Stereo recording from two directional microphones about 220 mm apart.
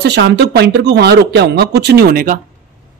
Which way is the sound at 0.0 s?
50° right (ahead or behind).